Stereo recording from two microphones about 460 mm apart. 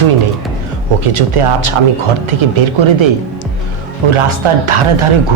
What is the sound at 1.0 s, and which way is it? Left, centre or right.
Speech, right.